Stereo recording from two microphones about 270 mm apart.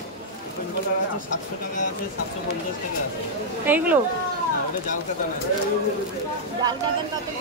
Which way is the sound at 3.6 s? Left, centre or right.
Centre.